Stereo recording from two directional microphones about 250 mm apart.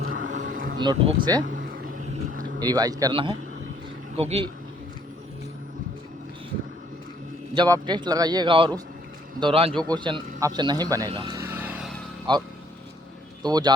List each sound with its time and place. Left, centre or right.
0.0 s a sound: right
0.8 s a man's voice: centre
1.5 s a sound: right
2.6 s a man's voice: centre
7.5 s a man's voice: centre
9.7 s a man's voice: centre
10.0 s speech: centre
12.3 s a man's voice: centre